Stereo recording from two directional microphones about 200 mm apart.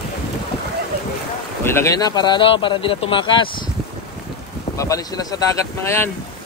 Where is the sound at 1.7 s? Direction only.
15° left (ahead or behind).